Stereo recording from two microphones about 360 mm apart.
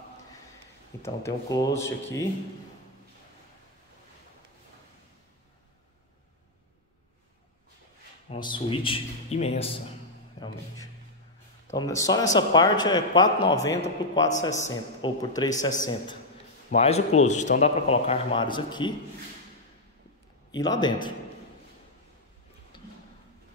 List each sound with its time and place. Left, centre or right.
1.0 s a man's voice: centre
8.3 s a man's voice: centre
11.6 s a man's voice: centre
20.5 s a man's voice: centre